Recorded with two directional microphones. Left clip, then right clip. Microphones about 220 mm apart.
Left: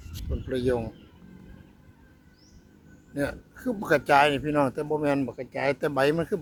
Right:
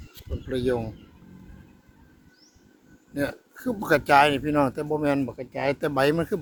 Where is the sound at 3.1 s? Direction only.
10° right (ahead or behind).